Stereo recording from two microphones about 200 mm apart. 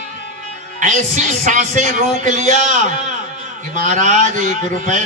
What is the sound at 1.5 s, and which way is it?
A man's voice, 40° right (ahead or behind).